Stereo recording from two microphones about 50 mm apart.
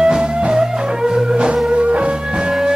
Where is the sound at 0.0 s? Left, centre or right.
Centre.